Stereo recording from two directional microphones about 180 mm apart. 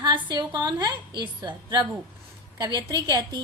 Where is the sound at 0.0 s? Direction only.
25° right (ahead or behind).